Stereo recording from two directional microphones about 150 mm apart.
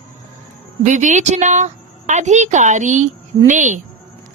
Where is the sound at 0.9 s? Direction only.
55° right (ahead or behind).